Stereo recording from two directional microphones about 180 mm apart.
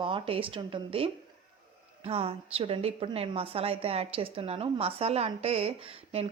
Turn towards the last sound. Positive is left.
turn(degrees=-30)  # may be behind; listen again after turning